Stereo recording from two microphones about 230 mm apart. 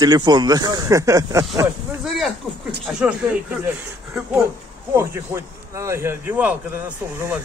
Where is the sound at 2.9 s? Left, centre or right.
Centre.